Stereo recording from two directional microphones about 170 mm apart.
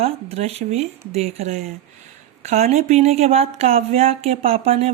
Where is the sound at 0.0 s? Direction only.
40° right (ahead or behind).